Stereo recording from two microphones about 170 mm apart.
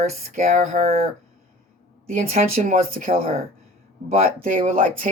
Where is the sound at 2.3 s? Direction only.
50° right (ahead or behind).